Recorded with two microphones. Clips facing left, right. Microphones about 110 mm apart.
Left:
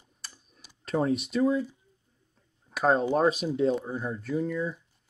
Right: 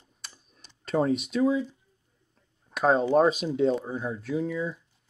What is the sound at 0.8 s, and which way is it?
Speech, centre (ahead or behind).